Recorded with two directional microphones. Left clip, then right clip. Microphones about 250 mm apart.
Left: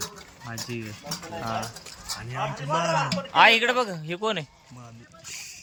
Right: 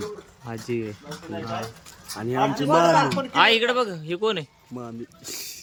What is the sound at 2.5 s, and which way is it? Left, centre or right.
Speech, right.